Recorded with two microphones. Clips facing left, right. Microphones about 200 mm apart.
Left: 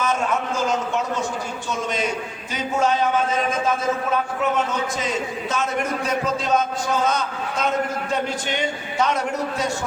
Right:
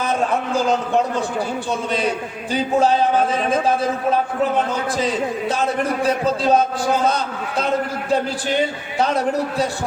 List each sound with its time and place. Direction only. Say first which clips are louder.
0.0 s a man's voice: right 2 dB; 35° right (ahead or behind)